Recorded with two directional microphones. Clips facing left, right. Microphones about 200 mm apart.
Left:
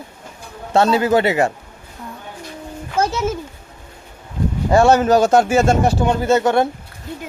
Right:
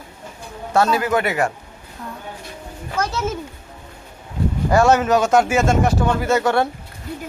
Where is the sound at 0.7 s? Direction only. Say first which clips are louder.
Left 3 dB; 25° left (ahead or behind).